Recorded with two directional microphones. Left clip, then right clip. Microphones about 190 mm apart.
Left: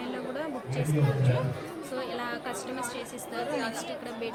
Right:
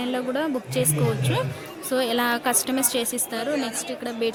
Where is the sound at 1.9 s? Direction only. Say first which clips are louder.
Right 12 dB; 55° right (ahead or behind).